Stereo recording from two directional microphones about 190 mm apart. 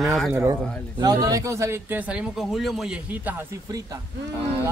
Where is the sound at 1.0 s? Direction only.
20° right (ahead or behind).